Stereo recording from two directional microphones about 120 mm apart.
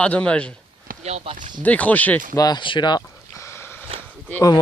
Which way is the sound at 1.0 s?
65° right (ahead or behind).